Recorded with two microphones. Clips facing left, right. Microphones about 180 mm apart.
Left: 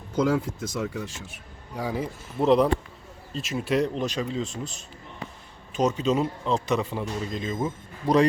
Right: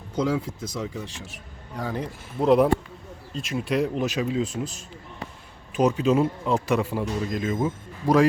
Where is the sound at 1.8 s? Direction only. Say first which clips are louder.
Left 1 dB; 5° left (ahead or behind).